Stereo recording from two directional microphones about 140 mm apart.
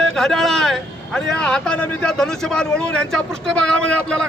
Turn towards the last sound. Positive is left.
turn(degrees=5)  # may be behind; listen again after turning